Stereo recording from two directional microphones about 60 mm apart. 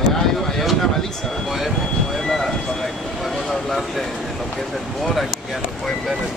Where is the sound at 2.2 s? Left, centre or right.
Centre.